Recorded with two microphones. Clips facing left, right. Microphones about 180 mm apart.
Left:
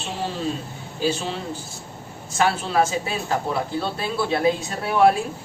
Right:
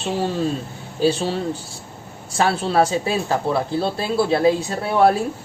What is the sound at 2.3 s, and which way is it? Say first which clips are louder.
Speech: right 2 dB; 35° right (ahead or behind).